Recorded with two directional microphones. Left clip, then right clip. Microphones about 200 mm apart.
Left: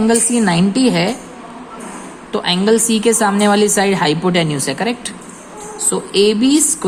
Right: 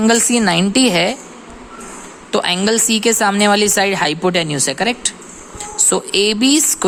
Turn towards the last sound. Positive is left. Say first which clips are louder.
# even
turn(degrees=-30)  # may be behind; listen again after turning